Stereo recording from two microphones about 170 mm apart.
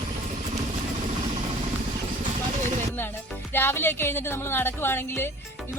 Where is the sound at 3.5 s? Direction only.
15° left (ahead or behind).